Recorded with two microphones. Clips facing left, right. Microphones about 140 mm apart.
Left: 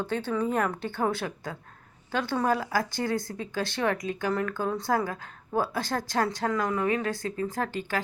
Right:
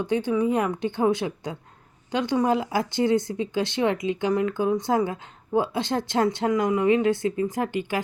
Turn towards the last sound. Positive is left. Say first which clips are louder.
# right 4 dB
turn(degrees=-15)  # may be behind; listen again after turning